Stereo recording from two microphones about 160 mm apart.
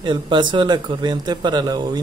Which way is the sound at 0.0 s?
30° right (ahead or behind).